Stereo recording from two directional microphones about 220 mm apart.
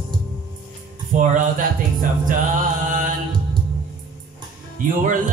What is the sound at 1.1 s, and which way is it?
Music, 35° right (ahead or behind).